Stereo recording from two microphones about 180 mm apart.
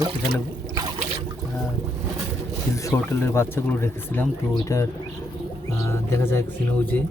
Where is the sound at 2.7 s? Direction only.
15° left (ahead or behind).